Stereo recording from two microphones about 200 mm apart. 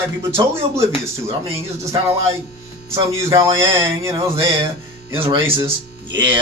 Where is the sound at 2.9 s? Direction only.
15° right (ahead or behind).